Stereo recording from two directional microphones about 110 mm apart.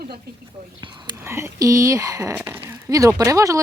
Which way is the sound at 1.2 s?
25° right (ahead or behind).